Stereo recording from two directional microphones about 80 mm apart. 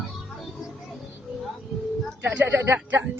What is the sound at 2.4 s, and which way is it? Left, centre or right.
Speech, right.